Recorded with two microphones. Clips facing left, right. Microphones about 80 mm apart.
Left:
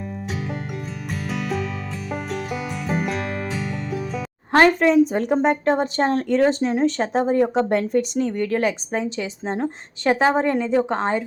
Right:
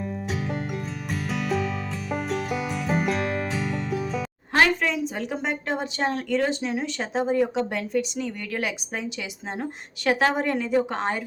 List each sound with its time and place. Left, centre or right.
1.3 s music: centre
4.5 s a woman's voice: left